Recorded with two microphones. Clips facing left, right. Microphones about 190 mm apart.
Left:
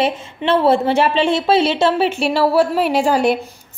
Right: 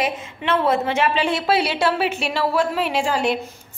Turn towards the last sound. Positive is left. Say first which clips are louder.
# left 6 dB
turn(degrees=40)  # may be behind; listen again after turning